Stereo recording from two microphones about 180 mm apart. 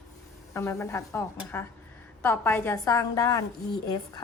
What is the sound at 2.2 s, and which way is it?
A woman's voice, 10° left (ahead or behind).